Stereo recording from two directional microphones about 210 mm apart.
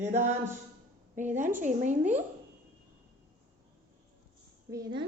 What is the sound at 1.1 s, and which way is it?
Speech, 35° right (ahead or behind).